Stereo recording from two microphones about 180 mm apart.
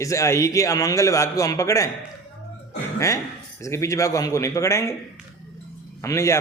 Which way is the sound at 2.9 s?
15° left (ahead or behind).